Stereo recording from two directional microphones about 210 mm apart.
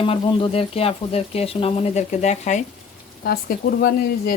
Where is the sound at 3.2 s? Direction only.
45° left (ahead or behind).